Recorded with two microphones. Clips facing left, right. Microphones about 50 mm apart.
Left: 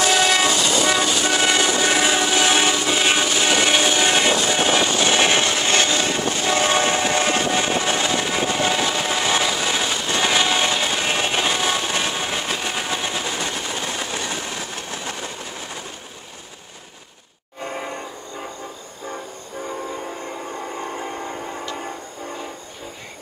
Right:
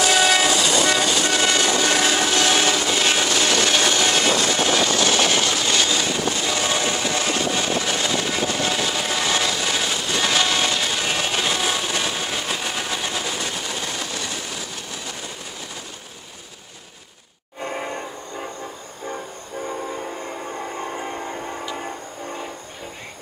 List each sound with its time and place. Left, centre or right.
0.0 s train: centre; by 14.2 s left
17.6 s train: centre
19.6 s train: centre